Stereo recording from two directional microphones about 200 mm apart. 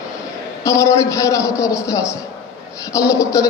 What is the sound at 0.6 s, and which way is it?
A man's voice, 15° left (ahead or behind).